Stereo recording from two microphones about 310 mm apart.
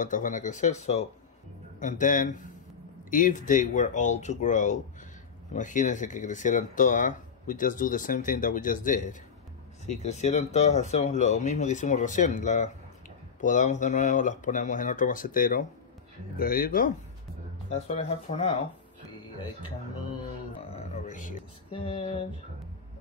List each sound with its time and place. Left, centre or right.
0.0 s speech: left
20.7 s speech: left